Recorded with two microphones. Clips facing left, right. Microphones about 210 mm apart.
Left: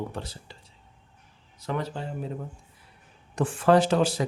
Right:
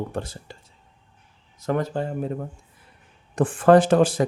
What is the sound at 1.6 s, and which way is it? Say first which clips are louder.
Speech: right 7 dB; 45° right (ahead or behind).